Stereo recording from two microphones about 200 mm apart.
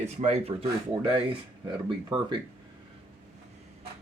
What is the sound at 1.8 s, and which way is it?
Speech, 25° right (ahead or behind).